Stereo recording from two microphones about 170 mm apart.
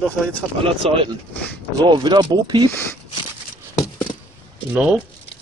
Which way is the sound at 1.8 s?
25° right (ahead or behind).